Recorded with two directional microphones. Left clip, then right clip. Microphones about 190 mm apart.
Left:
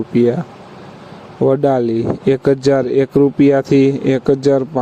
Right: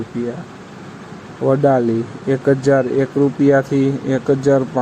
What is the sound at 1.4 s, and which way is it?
Speech, 45° left (ahead or behind).